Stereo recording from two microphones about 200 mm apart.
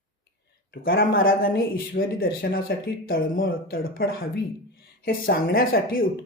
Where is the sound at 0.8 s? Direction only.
45° left (ahead or behind).